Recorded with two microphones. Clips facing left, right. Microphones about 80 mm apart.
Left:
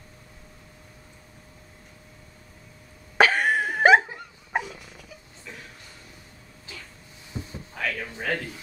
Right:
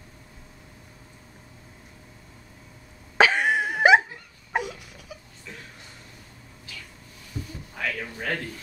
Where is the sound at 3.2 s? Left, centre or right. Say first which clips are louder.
Even; centre.